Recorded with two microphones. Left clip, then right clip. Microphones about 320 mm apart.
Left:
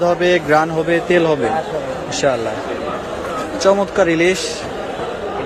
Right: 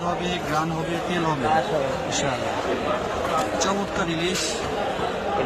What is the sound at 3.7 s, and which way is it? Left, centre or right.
Speech, centre.